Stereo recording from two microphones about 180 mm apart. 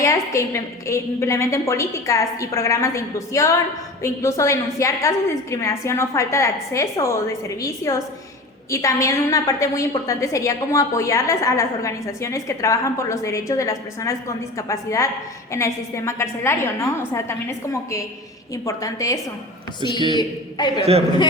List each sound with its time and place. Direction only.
0.0 s a woman's voice: 15° left (ahead or behind)